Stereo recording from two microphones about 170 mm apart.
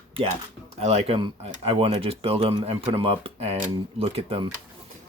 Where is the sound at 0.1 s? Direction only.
35° right (ahead or behind).